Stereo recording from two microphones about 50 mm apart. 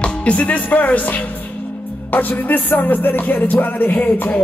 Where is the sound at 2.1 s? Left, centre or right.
Left.